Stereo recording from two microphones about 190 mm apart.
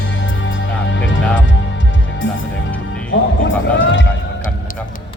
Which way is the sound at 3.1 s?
80° left.